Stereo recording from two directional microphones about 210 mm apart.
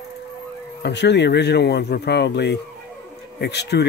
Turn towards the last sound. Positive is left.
turn(degrees=55)  # may be behind; listen again after turning